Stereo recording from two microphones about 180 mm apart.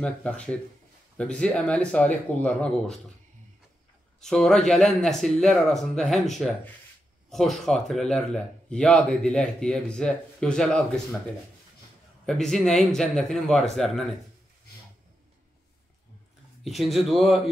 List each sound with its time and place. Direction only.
0.0 s speech: 5° left (ahead or behind)
4.2 s speech: 5° left (ahead or behind)
12.3 s speech: centre (ahead or behind)
16.6 s speech: centre (ahead or behind)